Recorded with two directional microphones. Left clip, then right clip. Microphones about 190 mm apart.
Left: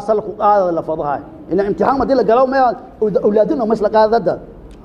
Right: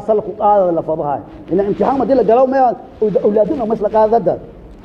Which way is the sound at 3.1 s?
30° left (ahead or behind).